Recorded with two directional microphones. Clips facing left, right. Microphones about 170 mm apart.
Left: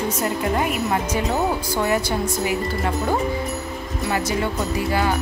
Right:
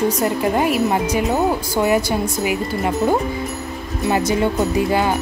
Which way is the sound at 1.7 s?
15° right (ahead or behind).